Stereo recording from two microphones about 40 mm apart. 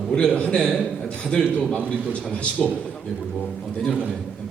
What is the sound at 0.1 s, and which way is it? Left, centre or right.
Speech, left.